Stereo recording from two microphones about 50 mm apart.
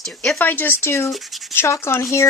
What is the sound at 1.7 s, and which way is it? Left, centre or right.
Speech, left.